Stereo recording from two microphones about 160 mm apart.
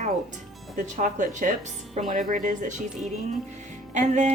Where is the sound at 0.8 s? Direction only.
50° right (ahead or behind).